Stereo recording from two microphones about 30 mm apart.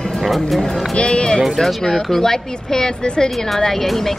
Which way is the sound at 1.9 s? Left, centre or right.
Centre.